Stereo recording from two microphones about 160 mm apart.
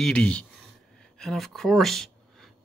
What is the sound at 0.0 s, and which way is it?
Speech, 5° left (ahead or behind).